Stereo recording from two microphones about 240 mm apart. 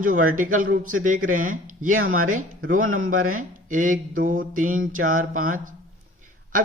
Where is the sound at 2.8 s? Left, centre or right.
Right.